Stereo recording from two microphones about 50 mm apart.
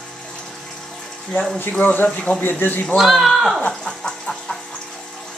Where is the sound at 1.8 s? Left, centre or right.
Left.